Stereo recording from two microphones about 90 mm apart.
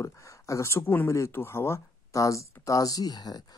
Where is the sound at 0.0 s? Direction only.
35° left (ahead or behind).